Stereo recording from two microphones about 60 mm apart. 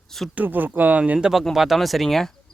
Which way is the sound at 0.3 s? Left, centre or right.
Right.